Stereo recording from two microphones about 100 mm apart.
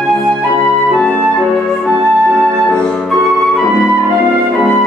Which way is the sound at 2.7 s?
5° left (ahead or behind).